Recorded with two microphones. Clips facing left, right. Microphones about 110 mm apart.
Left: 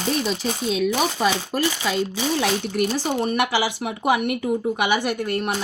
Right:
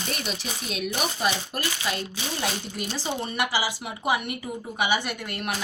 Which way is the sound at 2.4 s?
65° left (ahead or behind).